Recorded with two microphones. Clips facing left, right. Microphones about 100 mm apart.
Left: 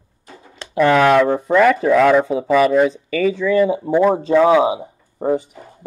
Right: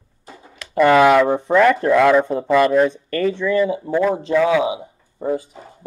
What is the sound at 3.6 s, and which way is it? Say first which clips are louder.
Speech: left 4 dB; 25° left (ahead or behind).